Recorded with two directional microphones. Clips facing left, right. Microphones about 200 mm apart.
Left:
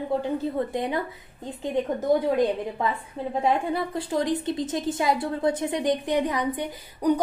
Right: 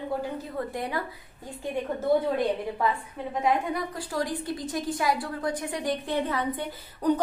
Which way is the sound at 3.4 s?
25° left (ahead or behind).